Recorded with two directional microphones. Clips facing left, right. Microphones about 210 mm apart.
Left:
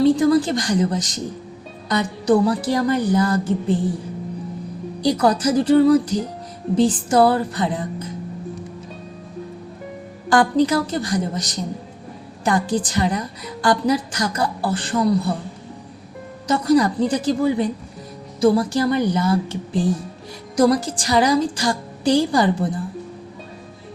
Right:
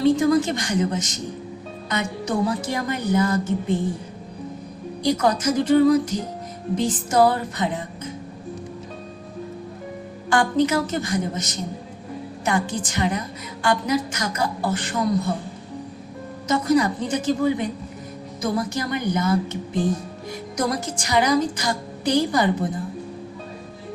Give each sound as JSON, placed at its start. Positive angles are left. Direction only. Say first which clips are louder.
{"t": 0.0, "sound": "a woman's voice", "louder": "left 3 dB", "side_deg": 35}
{"t": 5.0, "sound": "a woman's voice", "louder": "left 3 dB", "side_deg": 35}
{"t": 10.2, "sound": "a woman's voice", "louder": "left 3 dB", "side_deg": 35}
{"t": 16.5, "sound": "a woman's voice", "louder": "left 3 dB", "side_deg": 35}